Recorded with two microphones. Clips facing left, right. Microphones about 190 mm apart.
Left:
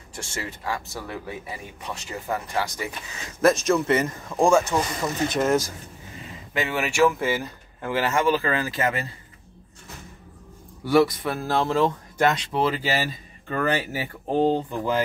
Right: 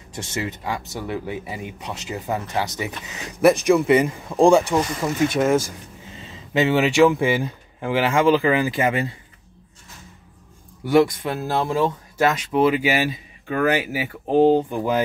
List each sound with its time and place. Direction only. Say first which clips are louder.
0.1 s speech: right 6 dB; 20° right (ahead or behind)
6.1 s speech: right 7 dB; 25° right (ahead or behind)
10.9 s speech: right 2 dB; 20° right (ahead or behind)